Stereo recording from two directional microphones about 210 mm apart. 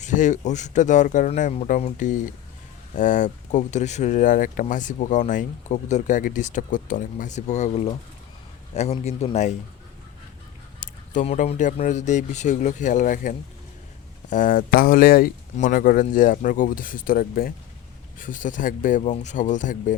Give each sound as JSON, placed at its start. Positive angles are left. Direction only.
{"t": 0.0, "sound": "speech", "side_deg": 35}
{"t": 10.8, "sound": "speech", "side_deg": 40}